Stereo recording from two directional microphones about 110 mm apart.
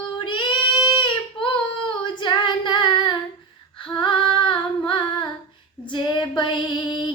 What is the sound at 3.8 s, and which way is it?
Female singing, 50° left (ahead or behind).